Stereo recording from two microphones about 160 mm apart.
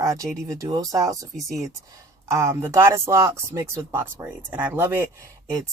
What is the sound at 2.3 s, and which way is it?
Speech, 20° right (ahead or behind).